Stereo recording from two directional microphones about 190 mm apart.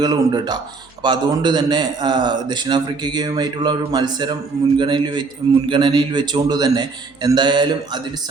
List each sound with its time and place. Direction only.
0.0 s a man's voice: 20° right (ahead or behind)